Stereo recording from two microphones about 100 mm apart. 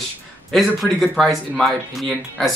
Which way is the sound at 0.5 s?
5° left (ahead or behind).